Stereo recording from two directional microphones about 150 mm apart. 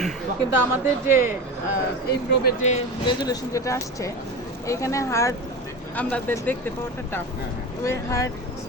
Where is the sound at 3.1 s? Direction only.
20° left (ahead or behind).